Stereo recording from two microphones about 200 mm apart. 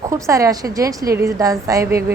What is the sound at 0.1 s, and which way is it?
A woman's voice, 15° right (ahead or behind).